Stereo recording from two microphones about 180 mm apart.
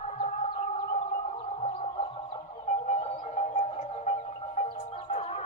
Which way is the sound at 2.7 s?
40° left (ahead or behind).